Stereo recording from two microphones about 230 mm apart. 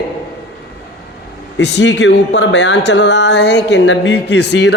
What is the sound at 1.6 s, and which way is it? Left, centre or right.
Speech, left.